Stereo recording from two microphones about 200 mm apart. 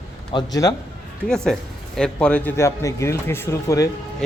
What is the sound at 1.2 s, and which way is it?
A man's voice, 5° left (ahead or behind).